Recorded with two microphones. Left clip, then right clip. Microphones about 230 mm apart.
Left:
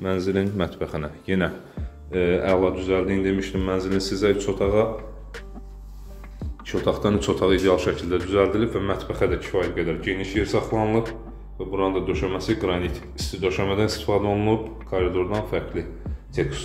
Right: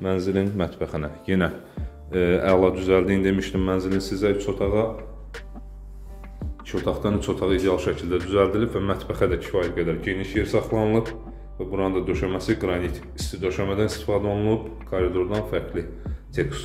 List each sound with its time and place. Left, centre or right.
0.0 s speech: centre
2.6 s speech: right
3.6 s speech: centre
6.6 s speech: centre